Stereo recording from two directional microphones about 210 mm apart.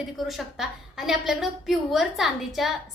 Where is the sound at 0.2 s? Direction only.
Centre (ahead or behind).